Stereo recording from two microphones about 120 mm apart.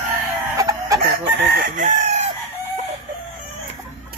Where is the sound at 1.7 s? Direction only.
90° right.